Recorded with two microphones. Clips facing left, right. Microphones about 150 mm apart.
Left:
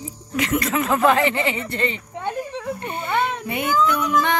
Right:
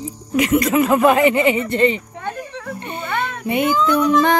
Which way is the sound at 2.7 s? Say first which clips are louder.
Even; 20° right (ahead or behind).